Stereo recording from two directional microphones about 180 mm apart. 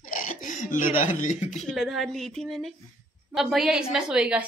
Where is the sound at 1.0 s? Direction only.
40° left (ahead or behind).